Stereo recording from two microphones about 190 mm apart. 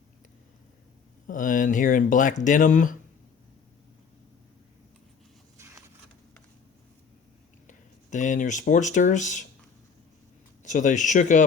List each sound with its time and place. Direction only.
1.3 s speech: 45° left (ahead or behind)
5.5 s a sound: 15° right (ahead or behind)
7.7 s speech: 40° left (ahead or behind)
10.6 s speech: 40° left (ahead or behind)